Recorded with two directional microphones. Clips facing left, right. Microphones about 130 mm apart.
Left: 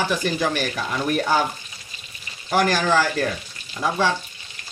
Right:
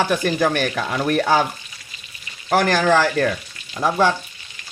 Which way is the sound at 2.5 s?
55° right (ahead or behind).